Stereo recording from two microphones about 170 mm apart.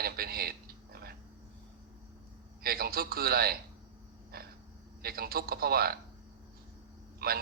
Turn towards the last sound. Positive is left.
turn(degrees=-65)  # may be behind; listen again after turning